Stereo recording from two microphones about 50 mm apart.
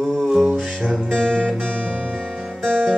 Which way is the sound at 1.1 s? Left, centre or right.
Centre.